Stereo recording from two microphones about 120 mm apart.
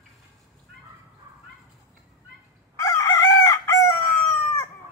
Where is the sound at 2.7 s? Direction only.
25° left (ahead or behind).